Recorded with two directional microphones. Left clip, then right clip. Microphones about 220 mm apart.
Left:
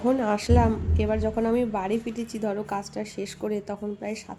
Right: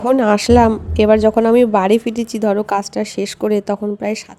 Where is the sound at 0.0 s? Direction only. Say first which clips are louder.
Right 11 dB; 40° right (ahead or behind).